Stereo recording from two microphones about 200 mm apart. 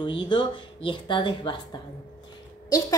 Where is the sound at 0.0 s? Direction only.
25° left (ahead or behind).